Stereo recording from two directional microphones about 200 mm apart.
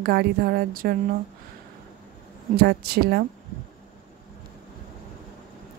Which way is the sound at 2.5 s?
50° right (ahead or behind).